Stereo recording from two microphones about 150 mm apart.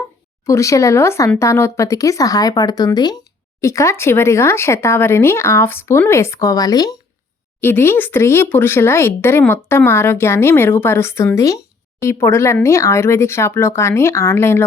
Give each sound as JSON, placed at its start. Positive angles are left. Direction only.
{"t": 0.4, "sound": "speech", "side_deg": 20}
{"t": 7.6, "sound": "speech", "side_deg": 15}